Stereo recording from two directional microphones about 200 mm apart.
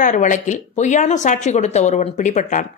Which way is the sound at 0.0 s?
40° left (ahead or behind).